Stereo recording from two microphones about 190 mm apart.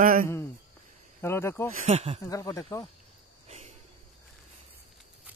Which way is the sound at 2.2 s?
15° left (ahead or behind).